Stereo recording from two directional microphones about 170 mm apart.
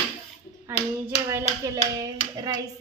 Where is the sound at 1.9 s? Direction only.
20° right (ahead or behind).